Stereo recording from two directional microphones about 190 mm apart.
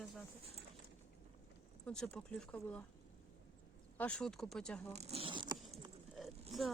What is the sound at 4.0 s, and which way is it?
Speech, 5° left (ahead or behind).